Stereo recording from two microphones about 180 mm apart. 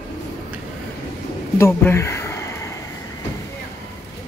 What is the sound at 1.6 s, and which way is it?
Speech, 15° left (ahead or behind).